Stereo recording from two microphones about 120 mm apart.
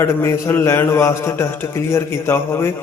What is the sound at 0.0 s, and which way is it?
A man's voice, 25° left (ahead or behind).